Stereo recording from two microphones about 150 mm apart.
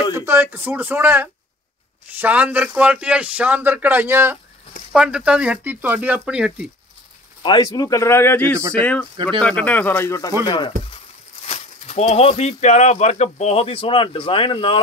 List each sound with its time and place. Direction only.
0.1 s a man's voice: 15° right (ahead or behind)
7.4 s speech: 25° left (ahead or behind)
10.4 s speech: 30° left (ahead or behind)
11.4 s speech: 45° left (ahead or behind)